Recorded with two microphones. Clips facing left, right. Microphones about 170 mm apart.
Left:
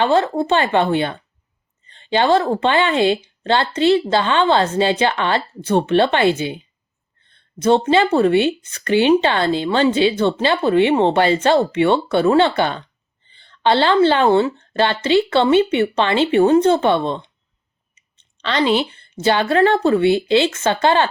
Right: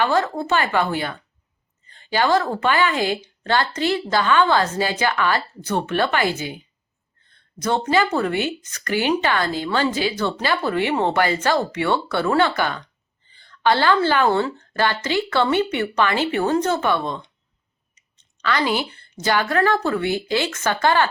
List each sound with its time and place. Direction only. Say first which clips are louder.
0.0 s speech: left 4 dB; 25° left (ahead or behind)
18.4 s speech: left 4 dB; 25° left (ahead or behind)